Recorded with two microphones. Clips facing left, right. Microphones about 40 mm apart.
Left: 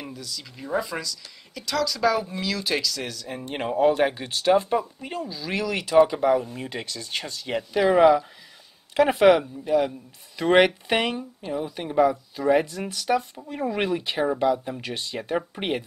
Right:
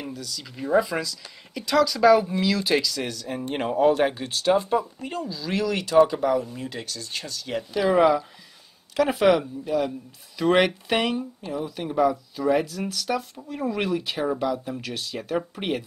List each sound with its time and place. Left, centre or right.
0.0 s speech: centre; by 7.9 s left
7.9 s speech: centre